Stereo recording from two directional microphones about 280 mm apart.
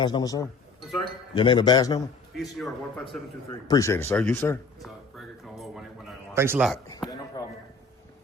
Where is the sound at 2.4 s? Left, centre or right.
Centre.